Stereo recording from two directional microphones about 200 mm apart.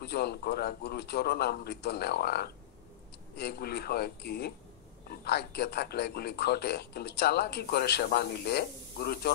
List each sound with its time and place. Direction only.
0.0 s a man's voice: 55° left (ahead or behind)